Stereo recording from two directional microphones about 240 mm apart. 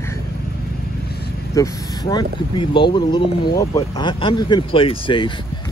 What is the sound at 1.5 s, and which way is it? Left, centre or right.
Speech, centre.